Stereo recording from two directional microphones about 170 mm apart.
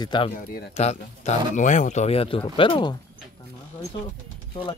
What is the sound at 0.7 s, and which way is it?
Speech, 40° left (ahead or behind).